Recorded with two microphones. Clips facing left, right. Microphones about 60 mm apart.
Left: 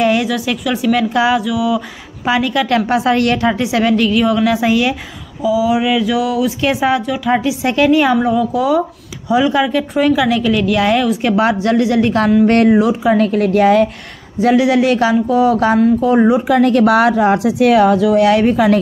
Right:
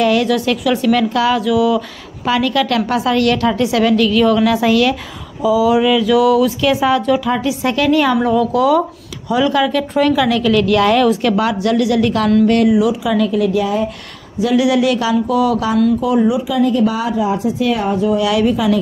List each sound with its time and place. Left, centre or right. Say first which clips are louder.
0.0 s a woman's voice: even; left
0.3 s speech: right 3 dB; centre
1.1 s a woman's voice: left 1 dB; centre
1.4 s speech: right 3 dB; centre
2.2 s a woman's voice: even; centre
5.4 s a woman's voice: right 2 dB; centre
11.2 s a woman's voice: left 1 dB; left
12.4 s speech: left 2 dB; left
14.4 s speech: left 2 dB; left
18.2 s speech: left 3 dB; left